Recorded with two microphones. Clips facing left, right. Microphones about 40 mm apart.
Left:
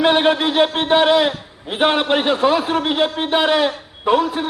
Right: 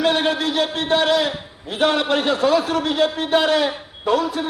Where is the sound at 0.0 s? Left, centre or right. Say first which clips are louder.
Left 4 dB; left.